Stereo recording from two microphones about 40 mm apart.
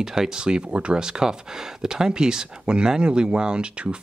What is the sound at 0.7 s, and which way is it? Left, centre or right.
Speech, right.